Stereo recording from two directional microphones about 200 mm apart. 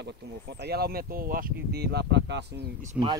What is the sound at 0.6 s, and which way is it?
Speech, 50° right (ahead or behind).